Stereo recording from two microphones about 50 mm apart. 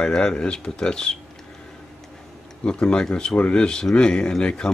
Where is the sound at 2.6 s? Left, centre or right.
Left.